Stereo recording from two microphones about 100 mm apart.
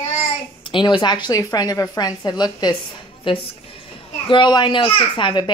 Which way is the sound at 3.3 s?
60° left (ahead or behind).